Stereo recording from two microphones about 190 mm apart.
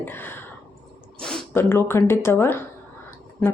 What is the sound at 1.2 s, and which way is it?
A woman's voice, 10° left (ahead or behind).